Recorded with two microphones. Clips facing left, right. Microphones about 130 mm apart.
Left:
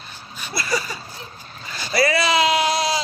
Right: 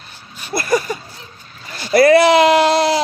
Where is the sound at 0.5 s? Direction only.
50° right (ahead or behind).